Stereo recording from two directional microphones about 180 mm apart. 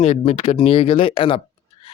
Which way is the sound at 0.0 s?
35° left (ahead or behind).